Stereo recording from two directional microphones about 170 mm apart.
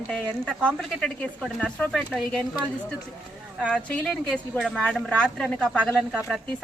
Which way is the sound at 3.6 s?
5° left (ahead or behind).